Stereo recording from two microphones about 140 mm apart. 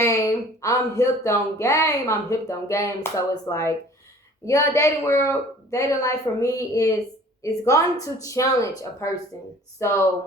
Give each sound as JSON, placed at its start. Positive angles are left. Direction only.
{"t": 0.0, "sound": "speech", "side_deg": 20}